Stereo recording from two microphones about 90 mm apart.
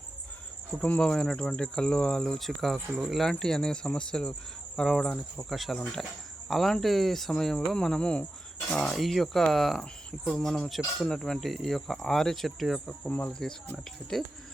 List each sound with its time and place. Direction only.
0.8 s cricket: 15° left (ahead or behind)
4.8 s speech: 5° left (ahead or behind)
13.1 s speech: 20° left (ahead or behind)
13.7 s speech: 5° left (ahead or behind)